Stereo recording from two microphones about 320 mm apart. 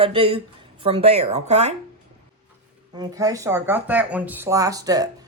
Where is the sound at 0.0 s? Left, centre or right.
Centre.